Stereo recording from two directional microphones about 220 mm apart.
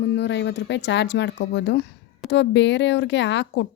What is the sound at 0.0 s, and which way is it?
Speech, 50° left (ahead or behind).